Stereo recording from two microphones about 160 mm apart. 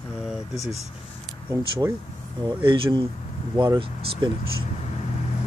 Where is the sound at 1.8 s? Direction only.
20° right (ahead or behind).